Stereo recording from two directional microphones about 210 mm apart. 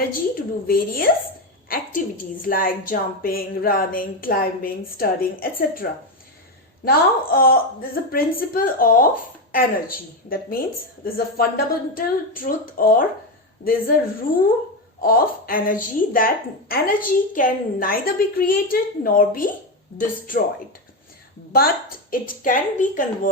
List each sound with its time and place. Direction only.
0.1 s a woman's voice: 45° left (ahead or behind)
13.6 s a woman's voice: 55° left (ahead or behind)
15.0 s a woman's voice: 45° left (ahead or behind)
21.5 s a woman's voice: 45° left (ahead or behind)